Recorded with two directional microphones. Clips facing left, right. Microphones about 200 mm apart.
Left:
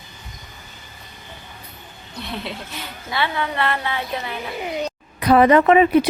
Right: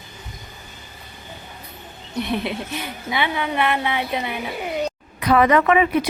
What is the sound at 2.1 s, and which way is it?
Speech, 20° right (ahead or behind).